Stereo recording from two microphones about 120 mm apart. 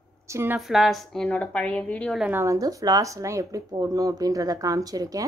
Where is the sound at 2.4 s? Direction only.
30° right (ahead or behind).